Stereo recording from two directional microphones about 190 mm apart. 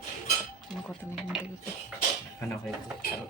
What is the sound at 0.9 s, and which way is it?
Speech, centre (ahead or behind).